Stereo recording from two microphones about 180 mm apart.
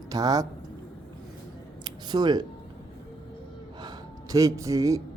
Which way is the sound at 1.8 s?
25° right (ahead or behind).